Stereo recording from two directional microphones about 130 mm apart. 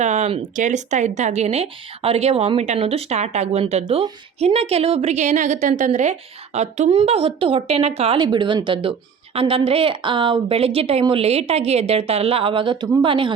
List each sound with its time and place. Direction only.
0.0 s a woman's voice: 60° right (ahead or behind)
8.2 s a woman's voice: 35° right (ahead or behind)